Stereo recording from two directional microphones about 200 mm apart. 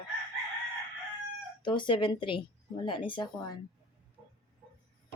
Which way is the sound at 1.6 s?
25° left (ahead or behind).